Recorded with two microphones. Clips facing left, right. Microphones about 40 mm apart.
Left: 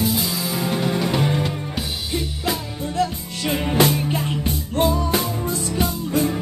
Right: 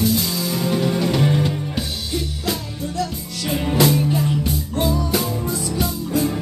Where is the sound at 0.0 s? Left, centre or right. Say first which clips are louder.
Right 2 dB; centre.